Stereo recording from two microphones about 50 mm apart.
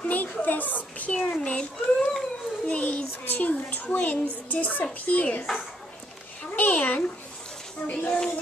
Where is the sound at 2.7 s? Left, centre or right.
Left.